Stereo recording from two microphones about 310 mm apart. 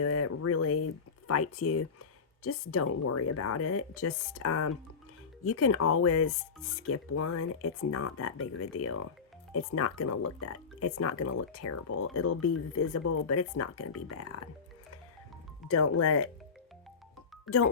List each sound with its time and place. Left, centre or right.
0.0 s a sound: left
1.3 s speech: left
15.7 s speech: left
17.4 s speech: left